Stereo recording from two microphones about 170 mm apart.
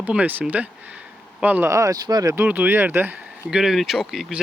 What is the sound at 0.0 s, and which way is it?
Speech, 10° right (ahead or behind).